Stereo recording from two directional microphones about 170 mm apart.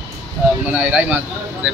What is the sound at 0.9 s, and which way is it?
Speech, 10° right (ahead or behind).